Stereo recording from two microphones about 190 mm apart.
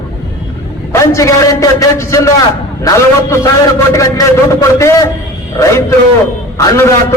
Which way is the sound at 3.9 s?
15° left (ahead or behind).